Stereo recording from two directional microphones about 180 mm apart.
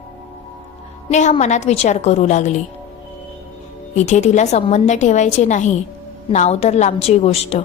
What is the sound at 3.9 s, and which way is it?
A woman's voice, 40° left (ahead or behind).